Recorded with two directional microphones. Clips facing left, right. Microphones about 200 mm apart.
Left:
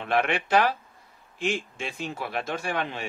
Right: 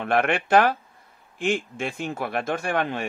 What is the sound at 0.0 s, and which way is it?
Speech, 50° right (ahead or behind).